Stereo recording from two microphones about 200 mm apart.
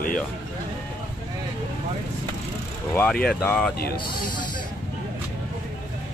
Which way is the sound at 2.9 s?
10° left (ahead or behind).